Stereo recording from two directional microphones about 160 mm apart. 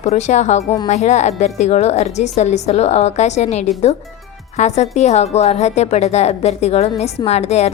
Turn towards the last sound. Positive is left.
turn(degrees=45)  # may be behind; listen again after turning